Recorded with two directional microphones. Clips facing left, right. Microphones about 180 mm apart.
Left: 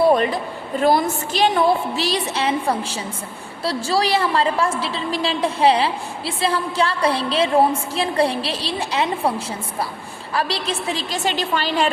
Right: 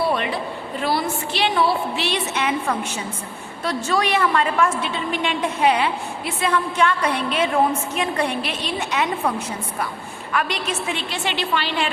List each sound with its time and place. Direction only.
0.1 s a sound: 40° left (ahead or behind)
0.8 s a woman's voice: 45° left (ahead or behind)
10.3 s a woman's voice: 35° left (ahead or behind)